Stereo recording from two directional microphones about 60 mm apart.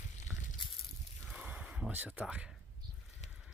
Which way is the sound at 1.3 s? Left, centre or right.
Right.